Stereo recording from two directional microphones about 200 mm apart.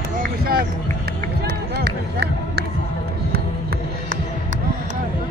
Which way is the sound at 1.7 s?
55° right (ahead or behind).